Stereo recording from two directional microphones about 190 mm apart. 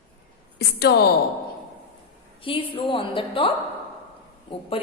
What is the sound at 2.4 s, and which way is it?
A woman's voice, 25° left (ahead or behind).